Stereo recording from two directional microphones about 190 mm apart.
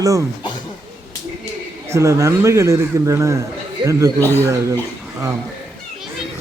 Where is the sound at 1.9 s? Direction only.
15° right (ahead or behind).